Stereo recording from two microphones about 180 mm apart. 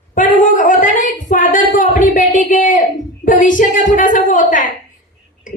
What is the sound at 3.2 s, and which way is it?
Speech, 45° left (ahead or behind).